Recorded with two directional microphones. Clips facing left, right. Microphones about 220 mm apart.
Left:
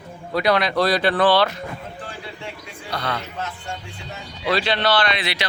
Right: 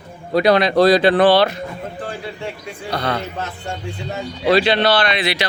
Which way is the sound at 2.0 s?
45° right (ahead or behind).